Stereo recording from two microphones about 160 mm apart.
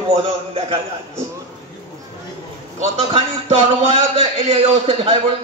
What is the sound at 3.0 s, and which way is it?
A man's voice, 40° right (ahead or behind).